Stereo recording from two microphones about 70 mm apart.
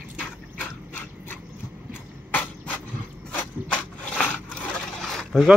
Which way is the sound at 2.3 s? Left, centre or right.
Left.